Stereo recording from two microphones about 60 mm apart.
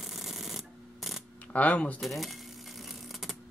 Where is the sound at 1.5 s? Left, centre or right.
Left.